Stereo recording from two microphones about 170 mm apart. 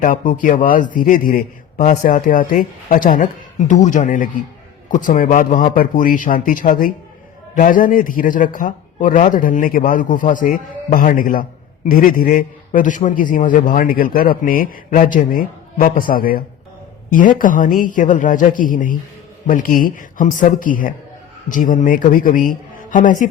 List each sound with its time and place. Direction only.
0.0 s a man's voice: 50° left (ahead or behind)